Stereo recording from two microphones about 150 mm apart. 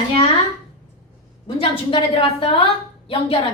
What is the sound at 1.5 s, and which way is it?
Speech, 35° left (ahead or behind).